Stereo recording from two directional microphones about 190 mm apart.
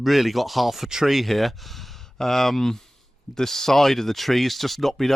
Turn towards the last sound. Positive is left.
turn(degrees=0)  # may be behind; listen again after turning